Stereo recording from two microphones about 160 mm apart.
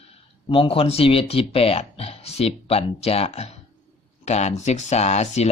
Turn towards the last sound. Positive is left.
turn(degrees=45)  # may be behind; listen again after turning